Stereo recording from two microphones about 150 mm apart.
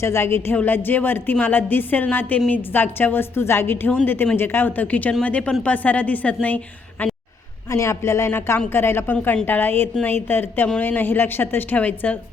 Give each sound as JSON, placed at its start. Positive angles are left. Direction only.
{"t": 0.0, "sound": "a woman's voice", "side_deg": 15}